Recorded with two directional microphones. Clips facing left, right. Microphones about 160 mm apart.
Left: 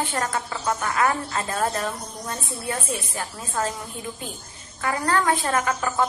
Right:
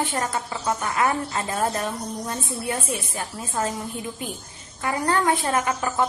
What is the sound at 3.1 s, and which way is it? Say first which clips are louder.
Speech: even; 20° right (ahead or behind).